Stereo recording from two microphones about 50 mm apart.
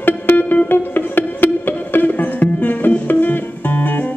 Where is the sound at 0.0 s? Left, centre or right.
Left.